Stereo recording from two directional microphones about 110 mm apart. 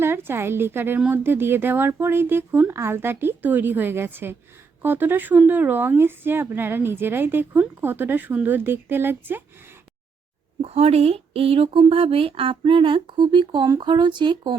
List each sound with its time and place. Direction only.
0.0 s speech: 20° right (ahead or behind)
10.6 s speech: 70° right (ahead or behind); by 14.5 s 45° right (ahead or behind)